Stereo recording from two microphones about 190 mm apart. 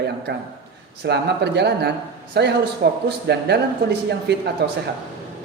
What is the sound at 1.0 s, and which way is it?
A man's voice, 60° right (ahead or behind).